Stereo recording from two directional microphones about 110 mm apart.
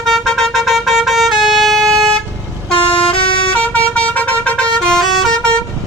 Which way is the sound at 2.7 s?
55° left (ahead or behind).